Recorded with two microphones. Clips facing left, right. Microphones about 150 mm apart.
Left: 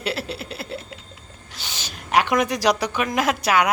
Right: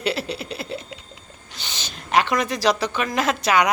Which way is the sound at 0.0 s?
5° left (ahead or behind).